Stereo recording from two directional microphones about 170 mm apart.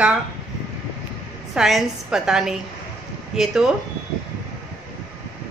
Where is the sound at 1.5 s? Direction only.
Centre (ahead or behind).